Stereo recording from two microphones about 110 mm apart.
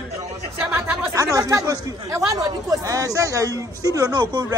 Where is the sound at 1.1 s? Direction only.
30° right (ahead or behind).